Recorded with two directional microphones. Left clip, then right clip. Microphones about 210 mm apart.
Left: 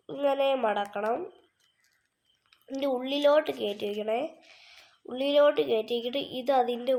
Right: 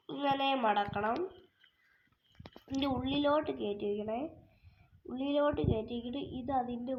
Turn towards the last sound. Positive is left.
turn(degrees=65)  # may be behind; listen again after turning